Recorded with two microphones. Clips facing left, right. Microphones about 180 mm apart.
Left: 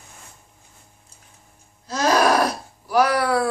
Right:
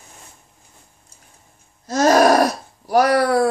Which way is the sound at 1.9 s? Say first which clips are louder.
Right 5 dB; 45° right (ahead or behind).